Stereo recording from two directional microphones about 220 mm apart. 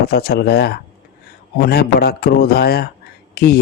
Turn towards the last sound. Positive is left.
turn(degrees=45)  # may be behind; listen again after turning